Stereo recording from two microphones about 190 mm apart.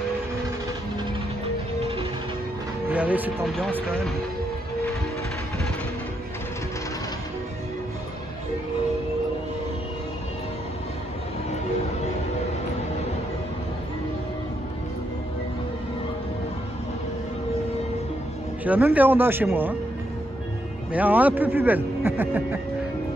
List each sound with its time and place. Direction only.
1.8 s music: 30° right (ahead or behind)
2.9 s a man's voice: 10° right (ahead or behind)
18.6 s a man's voice: 10° right (ahead or behind)
20.9 s a man's voice: 10° right (ahead or behind)